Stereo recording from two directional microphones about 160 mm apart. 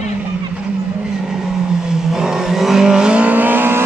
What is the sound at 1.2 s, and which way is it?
Vehicle, 5° right (ahead or behind).